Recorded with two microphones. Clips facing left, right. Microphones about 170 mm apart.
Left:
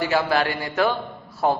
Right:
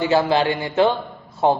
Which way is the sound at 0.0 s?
25° right (ahead or behind).